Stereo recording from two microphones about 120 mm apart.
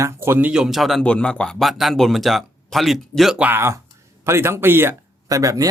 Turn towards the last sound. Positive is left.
turn(degrees=-30)  # may be behind; listen again after turning